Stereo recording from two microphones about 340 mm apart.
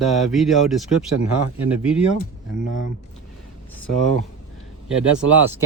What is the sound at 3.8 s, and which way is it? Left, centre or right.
Speech, right.